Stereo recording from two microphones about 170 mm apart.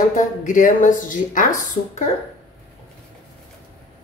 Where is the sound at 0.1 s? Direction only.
50° left (ahead or behind).